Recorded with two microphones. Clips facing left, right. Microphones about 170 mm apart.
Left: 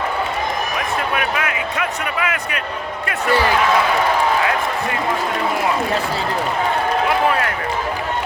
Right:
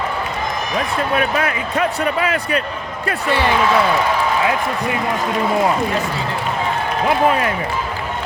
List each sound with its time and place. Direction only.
1.1 s speech: 35° right (ahead or behind)